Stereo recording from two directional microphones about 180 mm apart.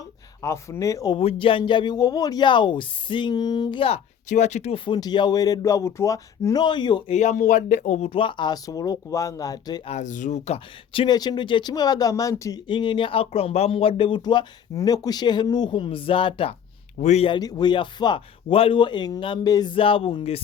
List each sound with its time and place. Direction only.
0.4 s speech: 15° left (ahead or behind)
1.2 s speech: 30° left (ahead or behind)
7.2 s speech: 40° left (ahead or behind); by 9.9 s 20° left (ahead or behind)
9.9 s speech: 45° left (ahead or behind)